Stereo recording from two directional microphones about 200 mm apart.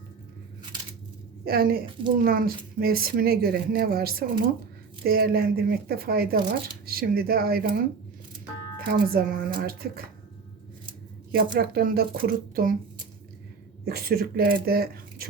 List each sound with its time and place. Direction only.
1.5 s a woman's voice: 50° right (ahead or behind)
8.8 s a woman's voice: 50° right (ahead or behind)
11.3 s a woman's voice: 50° right (ahead or behind)
13.8 s a woman's voice: 50° right (ahead or behind)